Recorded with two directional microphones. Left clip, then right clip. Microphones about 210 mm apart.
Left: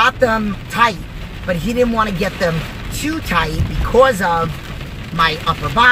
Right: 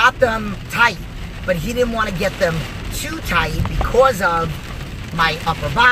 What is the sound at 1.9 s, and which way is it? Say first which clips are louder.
Speech: left 2 dB; 15° left (ahead or behind).